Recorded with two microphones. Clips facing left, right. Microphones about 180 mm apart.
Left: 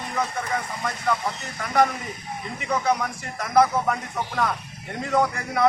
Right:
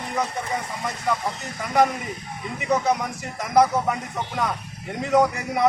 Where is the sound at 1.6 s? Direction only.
15° right (ahead or behind).